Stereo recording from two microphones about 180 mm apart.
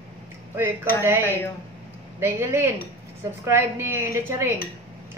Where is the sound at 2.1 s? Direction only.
15° right (ahead or behind).